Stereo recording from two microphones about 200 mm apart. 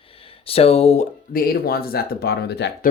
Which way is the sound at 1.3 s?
45° left (ahead or behind).